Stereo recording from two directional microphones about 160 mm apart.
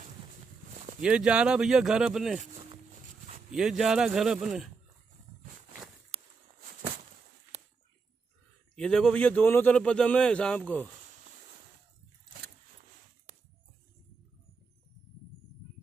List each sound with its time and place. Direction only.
1.0 s speech: 5° right (ahead or behind)
2.3 s a sound: 35° right (ahead or behind)
3.5 s speech: 5° right (ahead or behind)
8.7 s a man's voice: 5° left (ahead or behind)